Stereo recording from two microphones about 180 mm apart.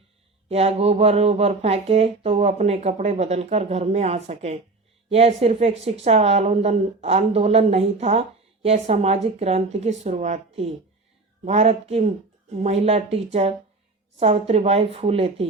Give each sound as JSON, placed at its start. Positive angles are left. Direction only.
{"t": 0.4, "sound": "speech", "side_deg": -35}